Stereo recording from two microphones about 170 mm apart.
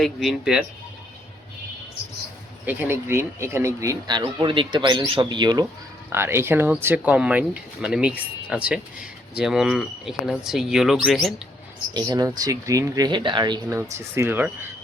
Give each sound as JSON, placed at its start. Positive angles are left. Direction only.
{"t": 0.0, "sound": "speech", "side_deg": 0}
{"t": 2.6, "sound": "speech", "side_deg": -10}
{"t": 6.1, "sound": "speech", "side_deg": -15}
{"t": 11.9, "sound": "speech", "side_deg": -25}